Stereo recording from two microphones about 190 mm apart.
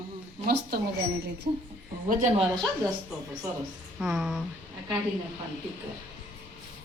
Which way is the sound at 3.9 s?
5° right (ahead or behind).